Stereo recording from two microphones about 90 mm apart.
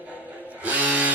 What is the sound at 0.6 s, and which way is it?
Guitar, 15° right (ahead or behind).